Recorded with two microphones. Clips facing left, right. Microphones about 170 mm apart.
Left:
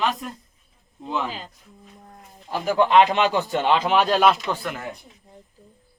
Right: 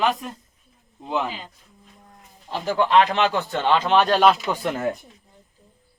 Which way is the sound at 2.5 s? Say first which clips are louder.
Left 1 dB; 15° left (ahead or behind).